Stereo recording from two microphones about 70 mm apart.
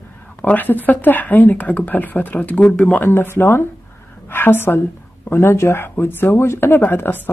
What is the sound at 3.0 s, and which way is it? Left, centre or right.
A woman's voice, left.